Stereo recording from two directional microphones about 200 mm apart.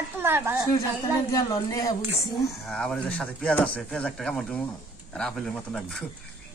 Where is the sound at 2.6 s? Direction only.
Centre (ahead or behind).